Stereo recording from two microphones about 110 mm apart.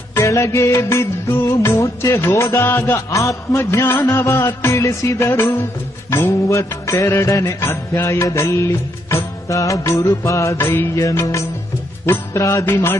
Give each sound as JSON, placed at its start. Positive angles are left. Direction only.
{"t": 0.1, "sound": "music", "side_deg": 25}